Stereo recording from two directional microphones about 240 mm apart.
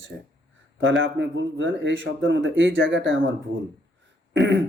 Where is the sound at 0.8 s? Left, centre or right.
Right.